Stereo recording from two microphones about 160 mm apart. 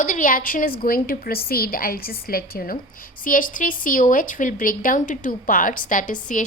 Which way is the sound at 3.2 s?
60° left (ahead or behind).